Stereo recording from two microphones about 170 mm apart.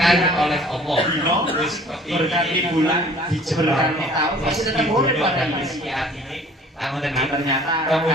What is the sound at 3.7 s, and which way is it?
A man's voice, centre (ahead or behind).